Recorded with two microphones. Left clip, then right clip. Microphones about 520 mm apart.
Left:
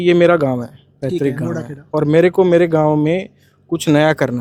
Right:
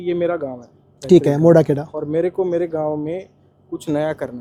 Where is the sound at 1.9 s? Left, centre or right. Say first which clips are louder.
Left 13 dB; left.